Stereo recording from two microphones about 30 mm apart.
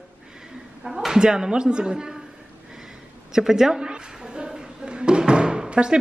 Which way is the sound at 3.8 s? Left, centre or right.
Right.